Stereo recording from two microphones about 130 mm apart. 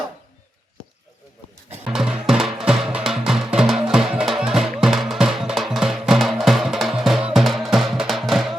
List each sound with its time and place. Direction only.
1.8 s music: 5° right (ahead or behind)